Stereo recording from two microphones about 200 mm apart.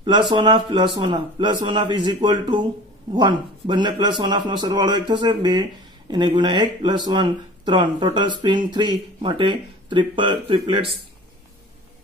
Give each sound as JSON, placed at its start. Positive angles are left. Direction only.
{"t": 0.0, "sound": "a man's voice", "side_deg": -25}